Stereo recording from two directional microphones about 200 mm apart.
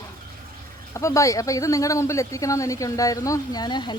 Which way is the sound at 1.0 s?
15° left (ahead or behind).